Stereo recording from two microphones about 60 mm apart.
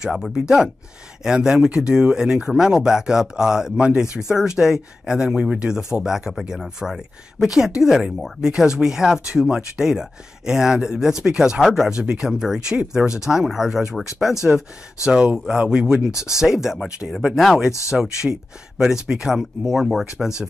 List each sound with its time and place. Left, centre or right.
0.0 s speech: centre
11.9 s speech: centre
14.3 s speech: left
15.0 s speech: centre